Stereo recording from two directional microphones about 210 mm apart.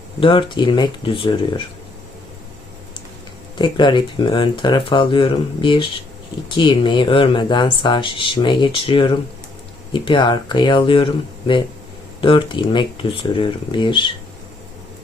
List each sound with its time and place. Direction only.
0.2 s speech: 25° left (ahead or behind)
3.6 s speech: 20° left (ahead or behind)